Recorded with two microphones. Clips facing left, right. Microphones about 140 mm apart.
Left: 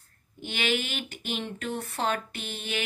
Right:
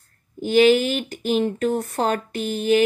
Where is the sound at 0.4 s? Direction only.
40° right (ahead or behind).